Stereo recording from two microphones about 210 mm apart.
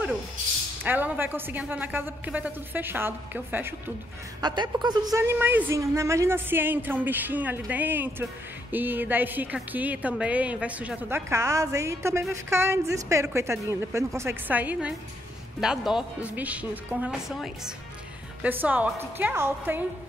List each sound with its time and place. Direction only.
0.8 s a woman's voice: 10° right (ahead or behind)
4.4 s a woman's voice: 20° right (ahead or behind)